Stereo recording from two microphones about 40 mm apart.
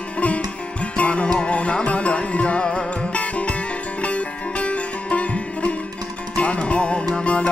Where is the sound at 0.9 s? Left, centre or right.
Left.